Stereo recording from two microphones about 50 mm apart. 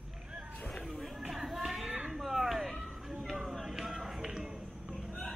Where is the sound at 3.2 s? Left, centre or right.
Centre.